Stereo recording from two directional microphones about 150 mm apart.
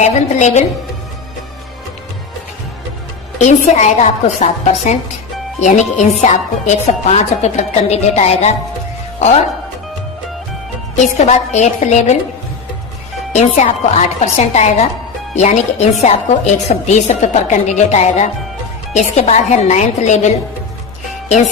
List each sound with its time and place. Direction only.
0.0 s speech: 50° left (ahead or behind)
3.3 s speech: 50° left (ahead or behind)
10.9 s speech: 50° left (ahead or behind)
13.3 s speech: 50° left (ahead or behind)